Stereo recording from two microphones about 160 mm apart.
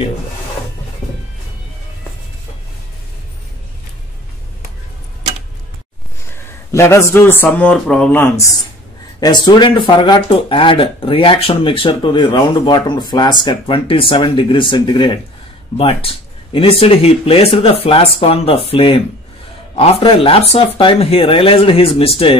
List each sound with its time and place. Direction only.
6.3 s speech: 15° left (ahead or behind)
9.2 s speech: 25° left (ahead or behind)